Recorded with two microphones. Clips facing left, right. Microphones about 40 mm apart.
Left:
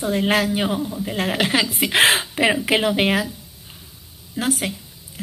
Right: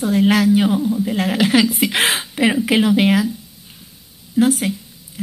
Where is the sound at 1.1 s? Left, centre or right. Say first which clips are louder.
Right 3 dB; left.